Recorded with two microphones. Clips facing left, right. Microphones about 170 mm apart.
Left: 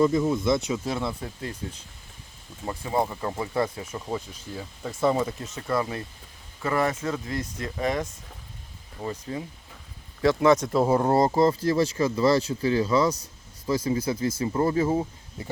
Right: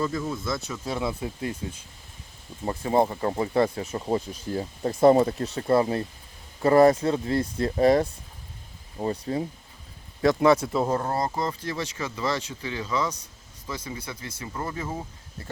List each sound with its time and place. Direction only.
0.0 s speech: 20° left (ahead or behind)
0.9 s speech: centre (ahead or behind)
1.2 s speech: 15° right (ahead or behind)
2.6 s speech: 25° right (ahead or behind)
5.0 s speech: 40° right (ahead or behind)
10.5 s speech: 5° right (ahead or behind)
11.0 s speech: 25° left (ahead or behind)
15.4 s speech: 15° left (ahead or behind)